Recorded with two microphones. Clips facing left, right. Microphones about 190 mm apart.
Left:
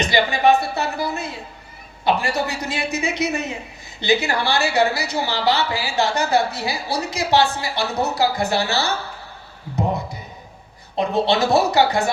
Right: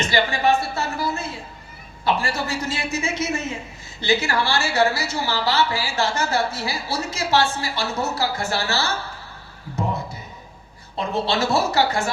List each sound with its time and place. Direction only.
0.0 s a woman's voice: 15° left (ahead or behind)
11.1 s a woman's voice: 15° left (ahead or behind)